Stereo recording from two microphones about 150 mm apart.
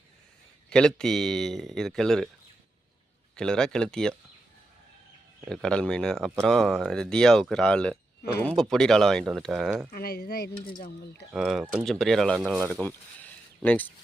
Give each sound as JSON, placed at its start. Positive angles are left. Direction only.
{"t": 0.7, "sound": "speech", "side_deg": 5}
{"t": 3.3, "sound": "speech", "side_deg": 5}
{"t": 5.5, "sound": "speech", "side_deg": 5}
{"t": 9.9, "sound": "speech", "side_deg": 85}
{"t": 11.3, "sound": "speech", "side_deg": 0}